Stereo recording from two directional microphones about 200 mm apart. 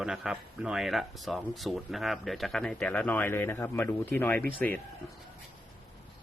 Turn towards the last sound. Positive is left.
turn(degrees=10)  # may be behind; listen again after turning